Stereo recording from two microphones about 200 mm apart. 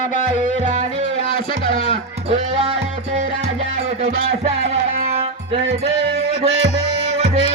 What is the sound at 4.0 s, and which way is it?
Music, 35° right (ahead or behind).